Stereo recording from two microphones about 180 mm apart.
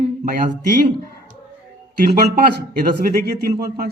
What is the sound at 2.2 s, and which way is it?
A man's voice, 60° right (ahead or behind).